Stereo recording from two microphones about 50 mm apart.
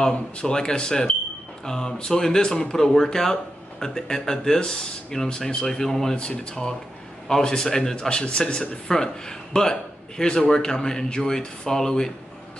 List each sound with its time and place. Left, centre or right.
0.0 s speech: centre
6.1 s speech: centre